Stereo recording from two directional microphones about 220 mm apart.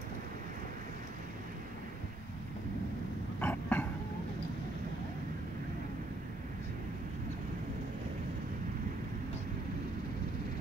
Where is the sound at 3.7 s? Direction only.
5° left (ahead or behind).